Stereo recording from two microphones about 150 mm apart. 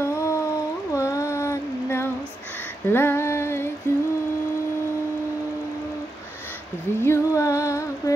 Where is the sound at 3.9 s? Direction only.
15° left (ahead or behind).